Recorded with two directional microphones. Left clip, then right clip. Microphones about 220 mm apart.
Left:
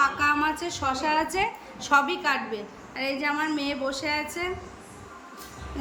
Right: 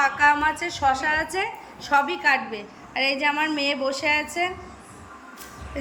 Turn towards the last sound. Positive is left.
turn(degrees=-5)  # may be behind; listen again after turning